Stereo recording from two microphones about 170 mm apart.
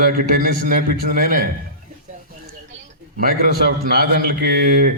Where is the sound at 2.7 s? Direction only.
60° right (ahead or behind).